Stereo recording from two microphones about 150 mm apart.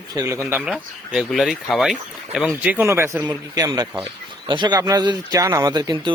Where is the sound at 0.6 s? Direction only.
5° right (ahead or behind).